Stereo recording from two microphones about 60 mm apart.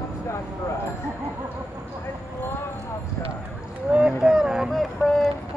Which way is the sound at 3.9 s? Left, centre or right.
Centre.